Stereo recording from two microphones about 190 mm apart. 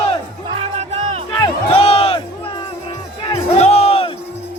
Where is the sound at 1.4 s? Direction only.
30° left (ahead or behind).